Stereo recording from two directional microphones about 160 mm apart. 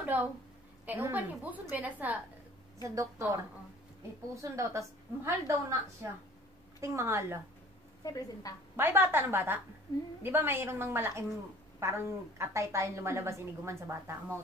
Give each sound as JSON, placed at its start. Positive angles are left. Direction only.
{"t": 0.0, "sound": "a sound", "side_deg": -10}
{"t": 0.8, "sound": "a woman's voice", "side_deg": -15}
{"t": 2.8, "sound": "a woman's voice", "side_deg": -20}
{"t": 4.4, "sound": "a woman's voice", "side_deg": -20}
{"t": 6.8, "sound": "a woman's voice", "side_deg": -20}
{"t": 8.0, "sound": "a woman's voice", "side_deg": 20}
{"t": 8.7, "sound": "a woman's voice", "side_deg": -15}
{"t": 9.9, "sound": "a woman's voice", "side_deg": 20}
{"t": 10.2, "sound": "a woman's voice", "side_deg": -15}